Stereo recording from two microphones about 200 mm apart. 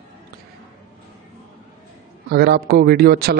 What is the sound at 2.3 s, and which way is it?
A man's voice, 55° right (ahead or behind).